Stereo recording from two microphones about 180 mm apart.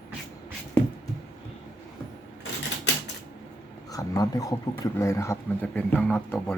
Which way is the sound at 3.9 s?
20° left (ahead or behind).